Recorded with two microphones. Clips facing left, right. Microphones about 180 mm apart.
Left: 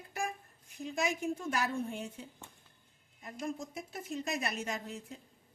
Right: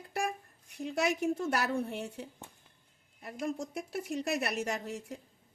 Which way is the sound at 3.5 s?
70° right (ahead or behind).